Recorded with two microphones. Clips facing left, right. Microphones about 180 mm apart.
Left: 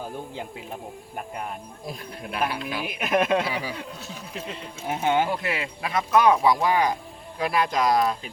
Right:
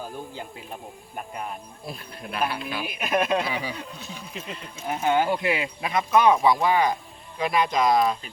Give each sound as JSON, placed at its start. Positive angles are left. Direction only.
{"t": 2.2, "sound": "speech", "side_deg": 10}
{"t": 3.6, "sound": "speech", "side_deg": 5}
{"t": 4.9, "sound": "speech", "side_deg": 20}
{"t": 5.4, "sound": "speech", "side_deg": -20}
{"t": 6.4, "sound": "speech", "side_deg": 10}